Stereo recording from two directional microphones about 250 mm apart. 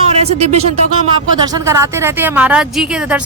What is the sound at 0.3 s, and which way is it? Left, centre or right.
Speech, right.